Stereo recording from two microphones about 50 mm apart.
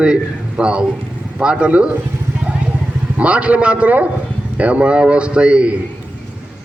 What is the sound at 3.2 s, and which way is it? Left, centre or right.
A man's voice, right.